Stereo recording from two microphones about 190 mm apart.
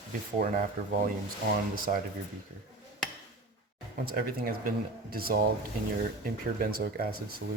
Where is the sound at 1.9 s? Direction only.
45° right (ahead or behind).